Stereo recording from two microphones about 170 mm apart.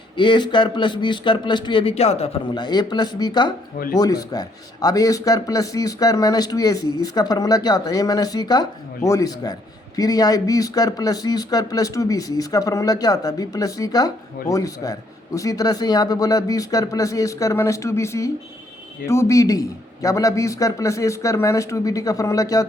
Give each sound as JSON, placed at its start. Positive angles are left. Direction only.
{"t": 0.2, "sound": "a man's voice", "side_deg": 30}